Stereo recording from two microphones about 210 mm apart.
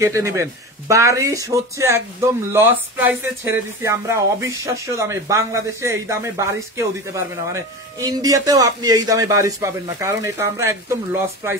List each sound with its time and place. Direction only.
0.0 s speech: 15° right (ahead or behind)